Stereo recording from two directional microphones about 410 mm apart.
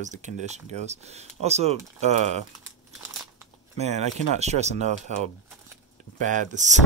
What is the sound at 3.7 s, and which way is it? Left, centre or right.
Speech, centre.